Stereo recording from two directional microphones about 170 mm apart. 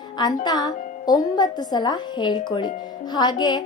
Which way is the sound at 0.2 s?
25° left (ahead or behind).